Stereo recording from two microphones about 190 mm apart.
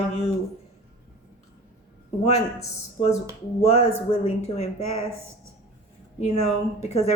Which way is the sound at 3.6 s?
35° left (ahead or behind).